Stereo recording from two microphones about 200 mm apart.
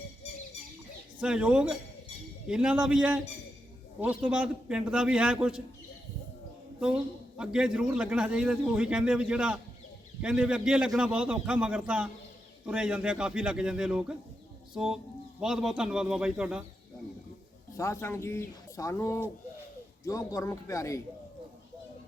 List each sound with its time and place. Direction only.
1.2 s a man's voice: 5° right (ahead or behind)
6.7 s a man's voice: 5° right (ahead or behind)
15.4 s a man's voice: centre (ahead or behind)
17.7 s speech: 15° left (ahead or behind)